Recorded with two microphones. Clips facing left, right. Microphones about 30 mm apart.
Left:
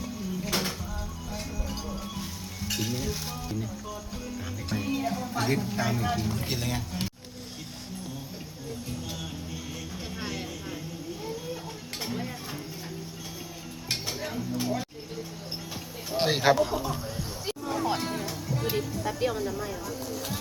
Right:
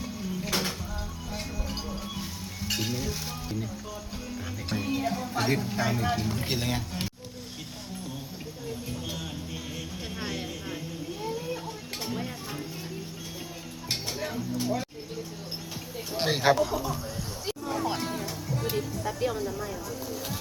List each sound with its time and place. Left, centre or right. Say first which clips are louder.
0.0 s a sound: even; centre
1.3 s music: right 1 dB; right
1.9 s music: even; centre
2.9 s speech: even; centre
4.7 s speech: even; centre
10.2 s vehicle: right 1 dB; centre
12.0 s music: even; centre
14.2 s a sound: right 1 dB; centre
16.2 s a sound: left 1 dB; centre
16.6 s speech: even; centre
17.4 s music: left 1 dB; centre